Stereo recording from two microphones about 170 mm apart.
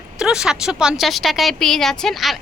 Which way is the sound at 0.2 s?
5° right (ahead or behind).